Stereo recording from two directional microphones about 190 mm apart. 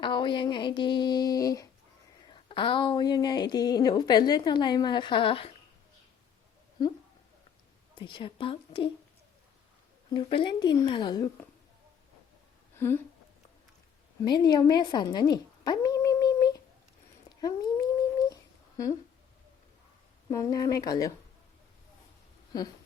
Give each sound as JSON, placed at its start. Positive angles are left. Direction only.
{"t": 0.0, "sound": "speech", "side_deg": 25}
{"t": 7.9, "sound": "speech", "side_deg": 25}
{"t": 10.1, "sound": "speech", "side_deg": 25}
{"t": 12.7, "sound": "speech", "side_deg": 10}
{"t": 14.3, "sound": "a sound", "side_deg": 20}
{"t": 18.8, "sound": "speech", "side_deg": 15}
{"t": 20.3, "sound": "speech", "side_deg": 20}
{"t": 22.5, "sound": "speech", "side_deg": 20}